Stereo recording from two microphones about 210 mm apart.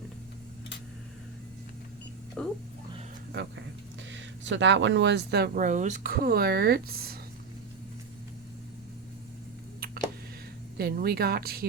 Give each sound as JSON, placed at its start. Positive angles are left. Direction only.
{"t": 2.4, "sound": "a sound", "side_deg": 5}
{"t": 4.1, "sound": "speech", "side_deg": -60}
{"t": 10.8, "sound": "speech", "side_deg": -45}